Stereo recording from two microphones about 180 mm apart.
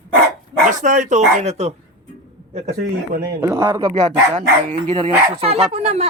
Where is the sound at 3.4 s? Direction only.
20° right (ahead or behind).